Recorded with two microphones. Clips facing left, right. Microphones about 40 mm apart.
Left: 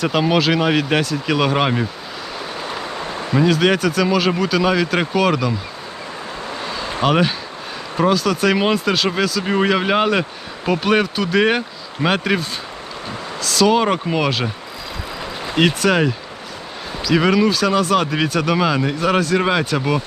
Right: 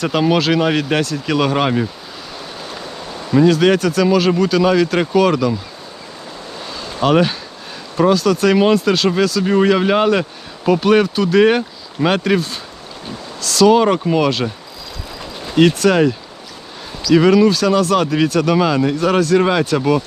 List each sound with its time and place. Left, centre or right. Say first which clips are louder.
0.0 s speech: right 1 dB; centre
2.6 s a sound: left 4 dB; left
3.3 s speech: right 4 dB; centre
6.6 s a sound: left 3 dB; centre
7.0 s speech: right 3 dB; centre
17.2 s speech: right 4 dB; centre